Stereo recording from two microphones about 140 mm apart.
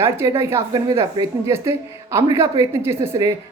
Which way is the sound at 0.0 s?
20° right (ahead or behind).